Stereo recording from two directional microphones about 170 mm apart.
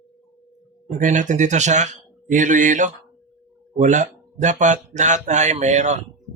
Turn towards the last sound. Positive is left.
turn(degrees=-45)  # may be behind; listen again after turning